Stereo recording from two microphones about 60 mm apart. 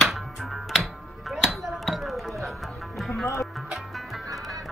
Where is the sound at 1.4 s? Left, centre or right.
Centre.